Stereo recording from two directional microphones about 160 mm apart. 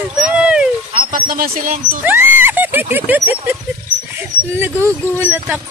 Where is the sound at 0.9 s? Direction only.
60° right (ahead or behind).